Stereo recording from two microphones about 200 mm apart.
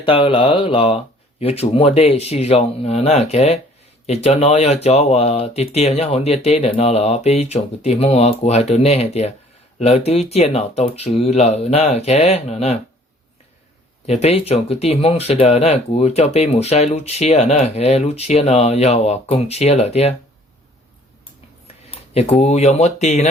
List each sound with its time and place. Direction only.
0.0 s speech: 25° left (ahead or behind)
14.1 s speech: 30° left (ahead or behind)
21.8 s speech: 30° left (ahead or behind)